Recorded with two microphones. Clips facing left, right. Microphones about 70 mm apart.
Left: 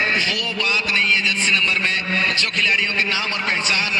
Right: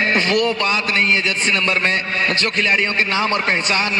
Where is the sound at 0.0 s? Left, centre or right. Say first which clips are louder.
Right 5 dB; right.